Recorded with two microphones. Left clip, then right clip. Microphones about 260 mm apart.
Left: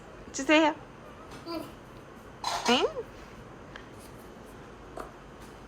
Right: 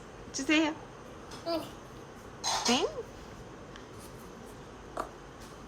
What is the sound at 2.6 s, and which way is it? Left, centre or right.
Speech, centre.